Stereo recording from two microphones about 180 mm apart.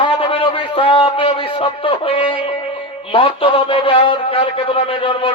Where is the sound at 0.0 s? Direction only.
30° left (ahead or behind).